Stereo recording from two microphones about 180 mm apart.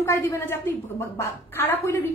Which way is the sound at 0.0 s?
15° left (ahead or behind).